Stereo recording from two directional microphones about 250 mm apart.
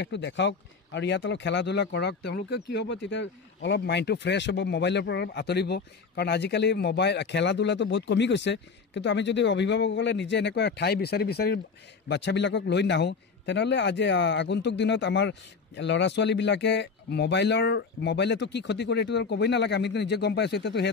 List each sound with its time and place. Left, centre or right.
0.0 s speech: left